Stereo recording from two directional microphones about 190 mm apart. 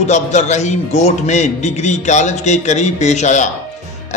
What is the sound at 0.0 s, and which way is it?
A man's voice, 40° left (ahead or behind).